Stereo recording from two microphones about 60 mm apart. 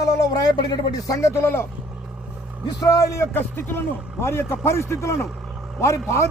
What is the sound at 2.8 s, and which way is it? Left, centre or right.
Speech, left.